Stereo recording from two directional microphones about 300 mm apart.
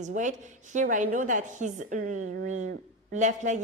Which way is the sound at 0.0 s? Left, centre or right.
Right.